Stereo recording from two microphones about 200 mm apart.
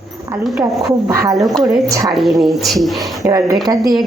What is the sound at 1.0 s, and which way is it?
Speech, 15° right (ahead or behind).